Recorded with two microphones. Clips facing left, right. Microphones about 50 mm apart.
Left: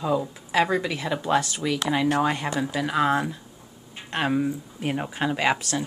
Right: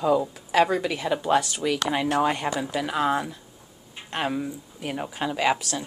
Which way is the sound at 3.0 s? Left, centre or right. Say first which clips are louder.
Left 3 dB; centre.